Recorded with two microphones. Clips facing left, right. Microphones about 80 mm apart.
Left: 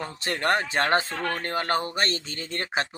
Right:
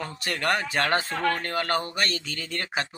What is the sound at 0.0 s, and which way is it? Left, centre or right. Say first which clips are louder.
Speech: left 1 dB; left.